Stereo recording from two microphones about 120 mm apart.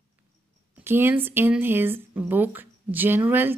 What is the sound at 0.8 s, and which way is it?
Speech, 20° right (ahead or behind).